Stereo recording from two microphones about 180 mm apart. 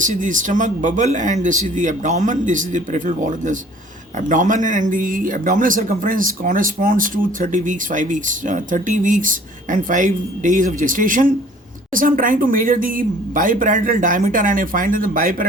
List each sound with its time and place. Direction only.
0.0 s speech: 45° right (ahead or behind)